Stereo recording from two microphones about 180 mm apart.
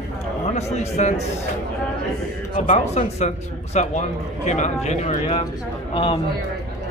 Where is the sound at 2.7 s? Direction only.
40° left (ahead or behind).